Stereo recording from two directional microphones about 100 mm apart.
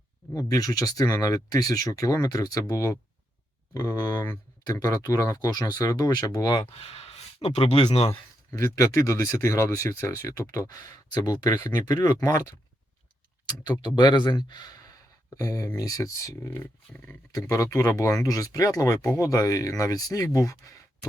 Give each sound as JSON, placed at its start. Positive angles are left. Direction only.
{"t": 0.3, "sound": "speech", "side_deg": 35}
{"t": 6.7, "sound": "speech", "side_deg": 75}
{"t": 8.4, "sound": "speech", "side_deg": 35}